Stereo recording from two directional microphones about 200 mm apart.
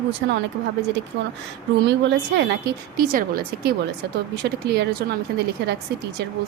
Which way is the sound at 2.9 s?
45° right (ahead or behind).